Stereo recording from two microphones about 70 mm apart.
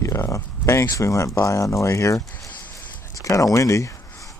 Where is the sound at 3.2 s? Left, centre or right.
Left.